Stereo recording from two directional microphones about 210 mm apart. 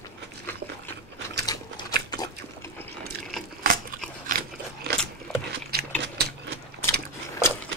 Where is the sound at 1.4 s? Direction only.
20° left (ahead or behind).